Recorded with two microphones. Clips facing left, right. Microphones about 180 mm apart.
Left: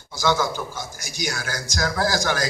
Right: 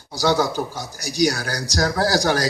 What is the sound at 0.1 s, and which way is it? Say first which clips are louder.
Speech: right 3 dB; 35° right (ahead or behind).